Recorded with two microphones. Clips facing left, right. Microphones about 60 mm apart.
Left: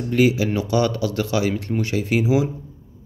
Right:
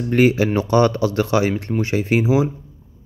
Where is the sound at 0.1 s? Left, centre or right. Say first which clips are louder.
Right 3 dB; right.